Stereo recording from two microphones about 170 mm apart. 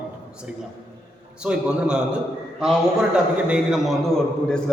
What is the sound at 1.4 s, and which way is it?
A man's voice, 5° right (ahead or behind).